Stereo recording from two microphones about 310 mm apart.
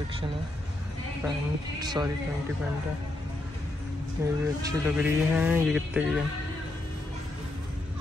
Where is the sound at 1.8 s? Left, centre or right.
Centre.